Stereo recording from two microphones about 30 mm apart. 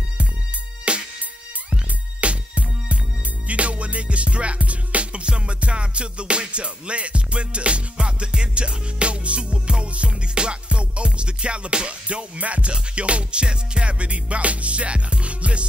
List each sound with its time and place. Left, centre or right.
0.9 s music: right
5.2 s music: right
12.7 s music: right